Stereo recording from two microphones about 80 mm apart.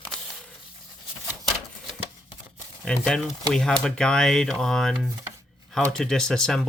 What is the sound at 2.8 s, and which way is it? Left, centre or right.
Speech, centre.